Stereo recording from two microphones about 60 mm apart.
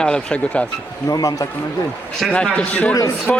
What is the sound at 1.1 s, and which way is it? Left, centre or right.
Speech, left.